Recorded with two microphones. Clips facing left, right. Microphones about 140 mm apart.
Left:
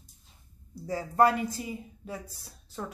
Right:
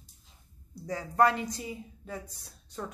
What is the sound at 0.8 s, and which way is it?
Speech, 5° left (ahead or behind).